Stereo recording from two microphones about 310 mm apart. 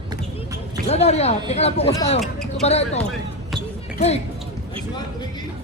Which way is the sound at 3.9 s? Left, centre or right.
Left.